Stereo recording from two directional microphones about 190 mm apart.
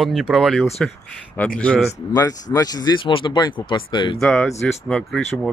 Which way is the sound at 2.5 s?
20° left (ahead or behind).